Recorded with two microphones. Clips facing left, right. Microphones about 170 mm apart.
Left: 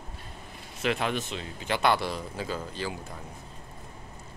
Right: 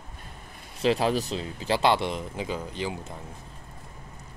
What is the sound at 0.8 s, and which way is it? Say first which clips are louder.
Speech: right 5 dB; 30° right (ahead or behind).